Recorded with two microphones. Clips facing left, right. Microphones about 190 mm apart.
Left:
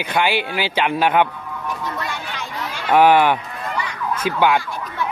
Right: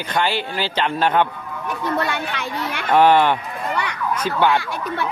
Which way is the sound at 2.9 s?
10° left (ahead or behind).